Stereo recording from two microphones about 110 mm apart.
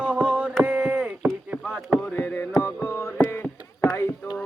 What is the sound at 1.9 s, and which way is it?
Music, 20° left (ahead or behind).